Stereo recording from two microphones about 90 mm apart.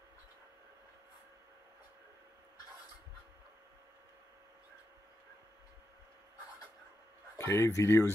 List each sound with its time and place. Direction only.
7.3 s speech: 30° left (ahead or behind)